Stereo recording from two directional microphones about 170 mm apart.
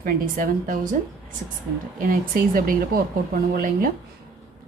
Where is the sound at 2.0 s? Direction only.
55° right (ahead or behind).